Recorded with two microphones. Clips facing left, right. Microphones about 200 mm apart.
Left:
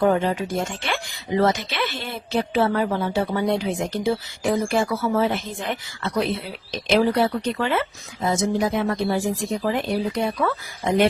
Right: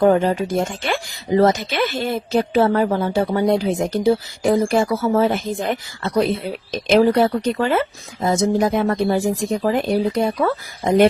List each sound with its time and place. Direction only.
0.0 s speech: 40° right (ahead or behind)